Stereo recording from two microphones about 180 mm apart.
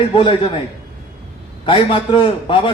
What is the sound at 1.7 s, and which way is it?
A man's voice, 30° left (ahead or behind).